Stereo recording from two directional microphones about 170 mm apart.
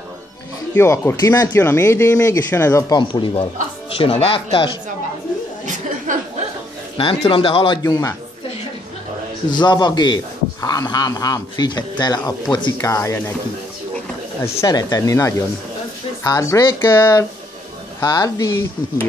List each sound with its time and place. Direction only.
0.7 s speech: 15° left (ahead or behind)
3.0 s speech: 30° left (ahead or behind)
6.1 s a sound: 50° right (ahead or behind)
7.0 s speech: 30° left (ahead or behind)
7.8 s speech: 20° left (ahead or behind)
9.5 s speech: 25° left (ahead or behind)
14.4 s speech: 15° left (ahead or behind)